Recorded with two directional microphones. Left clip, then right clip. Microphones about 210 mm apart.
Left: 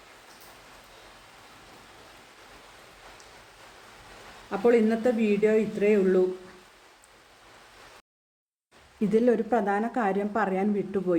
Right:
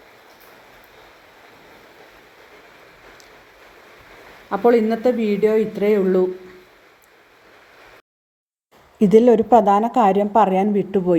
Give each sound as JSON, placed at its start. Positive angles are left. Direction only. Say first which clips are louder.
{"t": 4.6, "sound": "speech", "louder": "right 6 dB", "side_deg": -10}
{"t": 9.0, "sound": "a woman's voice", "louder": "right 11 dB", "side_deg": -20}